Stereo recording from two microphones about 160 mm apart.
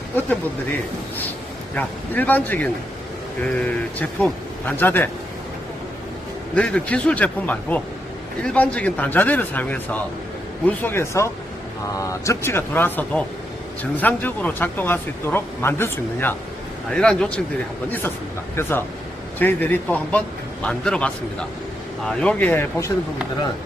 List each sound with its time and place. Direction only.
1.7 s speech: 10° left (ahead or behind)
6.6 s a man's voice: 5° left (ahead or behind)
18.5 s speech: 15° left (ahead or behind)